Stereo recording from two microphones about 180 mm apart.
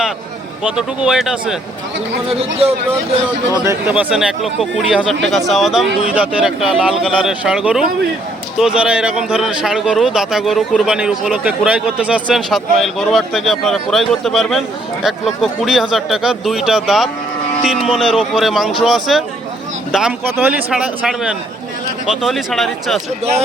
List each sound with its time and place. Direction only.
0.6 s a man's voice: 5° right (ahead or behind)
2.3 s speech: 35° right (ahead or behind)
3.7 s a man's voice: 10° right (ahead or behind)